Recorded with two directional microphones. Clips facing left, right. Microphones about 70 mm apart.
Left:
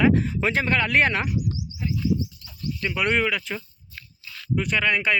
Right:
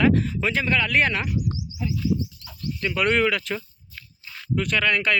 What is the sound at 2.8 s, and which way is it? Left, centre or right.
Speech, centre.